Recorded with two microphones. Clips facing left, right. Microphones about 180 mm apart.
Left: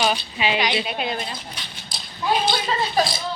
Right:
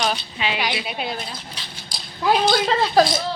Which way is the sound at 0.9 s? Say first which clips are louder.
Left 1 dB; centre (ahead or behind).